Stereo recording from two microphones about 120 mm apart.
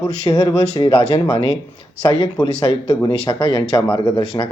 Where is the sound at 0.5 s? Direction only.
60° left (ahead or behind).